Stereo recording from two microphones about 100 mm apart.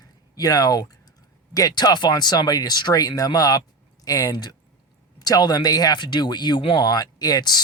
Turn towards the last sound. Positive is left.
turn(degrees=45)  # may be behind; listen again after turning